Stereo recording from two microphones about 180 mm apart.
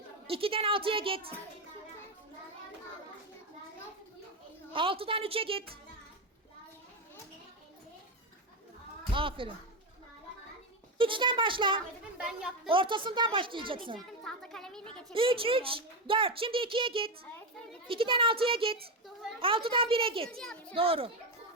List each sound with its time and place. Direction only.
0.3 s a woman's voice: 30° right (ahead or behind)
4.7 s a woman's voice: 30° right (ahead or behind)
9.1 s a child's voice: 30° right (ahead or behind)
10.9 s a child's voice: 30° right (ahead or behind)
12.1 s speech: 5° right (ahead or behind)
12.6 s a child's voice: 30° right (ahead or behind)
14.3 s a sound: 5° left (ahead or behind)
15.1 s a child's voice: 30° right (ahead or behind)
20.4 s speech: 5° left (ahead or behind)
20.7 s a woman's voice: 30° right (ahead or behind)